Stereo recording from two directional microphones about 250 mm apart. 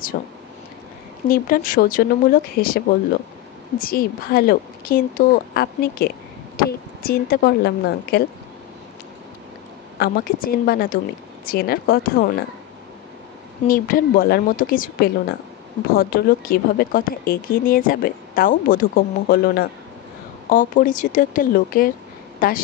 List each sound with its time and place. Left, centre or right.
0.1 s a woman's voice: left
1.3 s a woman's voice: left
9.9 s a woman's voice: left
13.7 s a woman's voice: left